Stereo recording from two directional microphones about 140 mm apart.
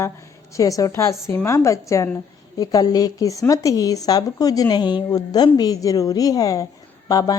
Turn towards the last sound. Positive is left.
turn(degrees=25)  # may be behind; listen again after turning